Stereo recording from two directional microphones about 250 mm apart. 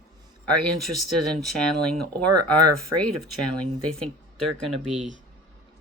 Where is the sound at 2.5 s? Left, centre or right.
Right.